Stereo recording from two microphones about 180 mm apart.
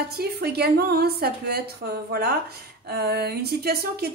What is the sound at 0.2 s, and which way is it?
Speech, 60° right (ahead or behind).